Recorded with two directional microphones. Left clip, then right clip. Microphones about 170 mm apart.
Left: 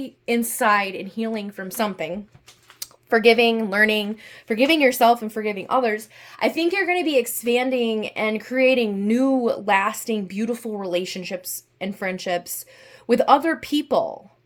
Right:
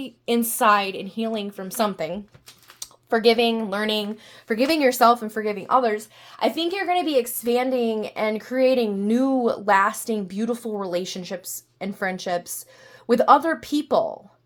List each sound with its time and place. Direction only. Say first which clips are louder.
0.0 s a woman's voice: even; centre (ahead or behind)
2.8 s speech: left 3 dB; 25° left (ahead or behind)
4.5 s a woman's voice: left 2 dB; 5° left (ahead or behind)